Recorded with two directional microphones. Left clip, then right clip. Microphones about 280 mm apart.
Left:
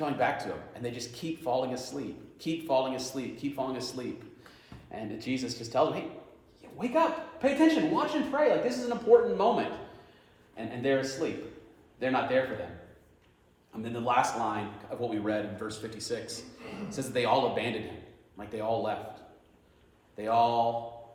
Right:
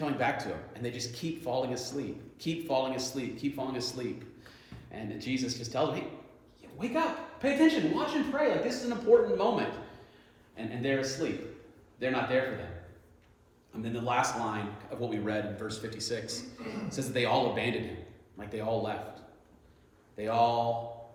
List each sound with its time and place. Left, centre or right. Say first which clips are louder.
0.0 s a man's voice: left 2 dB; centre
6.6 s a sound: left 4 dB; centre
7.9 s speech: left 2 dB; centre
13.7 s speech: left 3 dB; centre
20.1 s speech: left 2 dB; centre